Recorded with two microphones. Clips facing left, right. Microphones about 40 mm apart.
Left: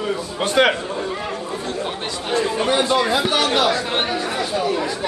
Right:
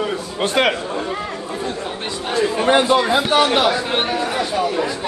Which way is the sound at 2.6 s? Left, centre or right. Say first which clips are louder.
Right 6 dB; right.